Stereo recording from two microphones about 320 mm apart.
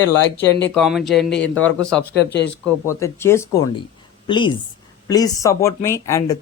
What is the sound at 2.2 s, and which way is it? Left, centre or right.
Speech, left.